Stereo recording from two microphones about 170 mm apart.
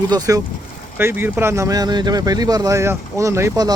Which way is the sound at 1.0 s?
15° right (ahead or behind).